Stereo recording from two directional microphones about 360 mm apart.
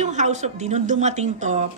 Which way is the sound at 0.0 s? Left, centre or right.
Centre.